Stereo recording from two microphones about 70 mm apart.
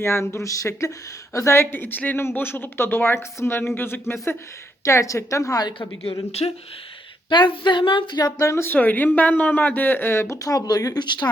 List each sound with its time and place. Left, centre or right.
0.0 s speech: left
4.9 s a woman's voice: left
7.3 s a woman's voice: left
8.4 s a woman's voice: left
8.6 s speech: left
10.4 s speech: left